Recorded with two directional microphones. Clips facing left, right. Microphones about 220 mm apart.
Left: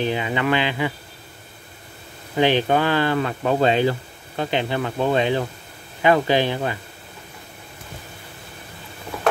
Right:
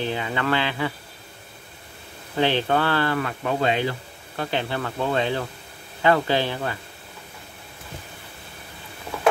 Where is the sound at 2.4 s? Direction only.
15° left (ahead or behind).